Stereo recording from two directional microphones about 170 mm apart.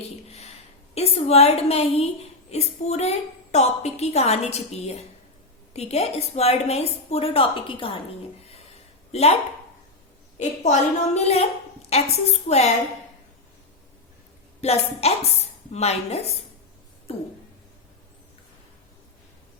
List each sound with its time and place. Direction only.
0.3 s a sound: 40° left (ahead or behind)
0.9 s a woman's voice: 35° left (ahead or behind)
9.1 s a woman's voice: 40° left (ahead or behind)
10.3 s a woman's voice: 40° left (ahead or behind)
14.6 s a woman's voice: 40° left (ahead or behind)